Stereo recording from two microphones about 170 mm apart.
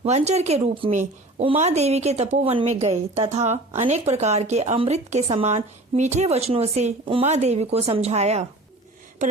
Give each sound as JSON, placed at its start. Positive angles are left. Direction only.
{"t": 0.0, "sound": "a woman's voice", "side_deg": -40}